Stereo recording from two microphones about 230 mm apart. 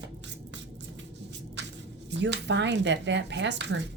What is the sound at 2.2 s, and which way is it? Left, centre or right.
A woman's voice, right.